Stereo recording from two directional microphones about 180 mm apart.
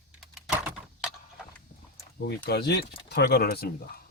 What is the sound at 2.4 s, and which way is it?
Speech, 65° left (ahead or behind).